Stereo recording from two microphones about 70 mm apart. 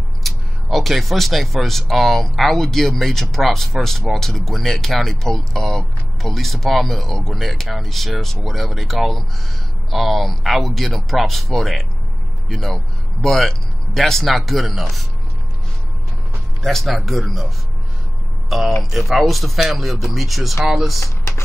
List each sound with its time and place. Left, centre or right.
0.2 s speech: centre
16.6 s speech: centre
18.8 s speech: centre
21.0 s chopping: left